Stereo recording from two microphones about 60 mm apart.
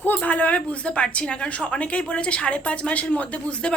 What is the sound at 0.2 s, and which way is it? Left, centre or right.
A woman's voice, left.